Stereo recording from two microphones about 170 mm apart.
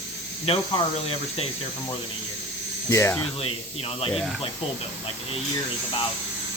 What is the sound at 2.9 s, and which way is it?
Speech, 15° left (ahead or behind).